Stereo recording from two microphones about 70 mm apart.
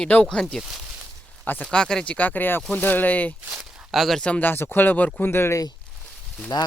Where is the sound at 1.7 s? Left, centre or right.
Centre.